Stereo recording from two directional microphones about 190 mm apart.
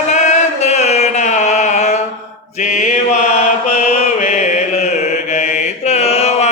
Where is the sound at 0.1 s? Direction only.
35° left (ahead or behind).